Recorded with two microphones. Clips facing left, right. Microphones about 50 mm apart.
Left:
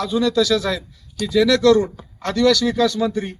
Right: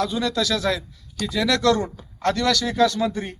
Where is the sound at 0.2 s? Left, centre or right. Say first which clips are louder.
Left 5 dB; centre.